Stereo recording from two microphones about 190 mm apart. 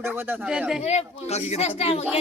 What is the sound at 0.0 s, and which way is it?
Speech, 10° right (ahead or behind).